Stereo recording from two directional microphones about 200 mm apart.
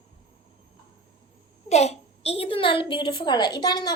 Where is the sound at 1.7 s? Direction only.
30° left (ahead or behind).